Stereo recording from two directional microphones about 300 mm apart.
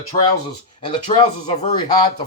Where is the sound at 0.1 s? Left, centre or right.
Centre.